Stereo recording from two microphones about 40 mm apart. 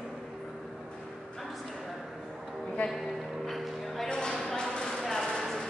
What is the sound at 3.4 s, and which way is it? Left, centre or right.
Music, centre.